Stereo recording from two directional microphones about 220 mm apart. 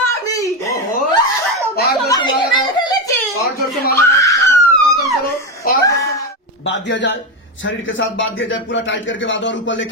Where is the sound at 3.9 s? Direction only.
15° left (ahead or behind).